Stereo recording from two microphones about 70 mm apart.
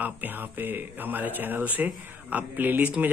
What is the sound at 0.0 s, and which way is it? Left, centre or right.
Speech, right.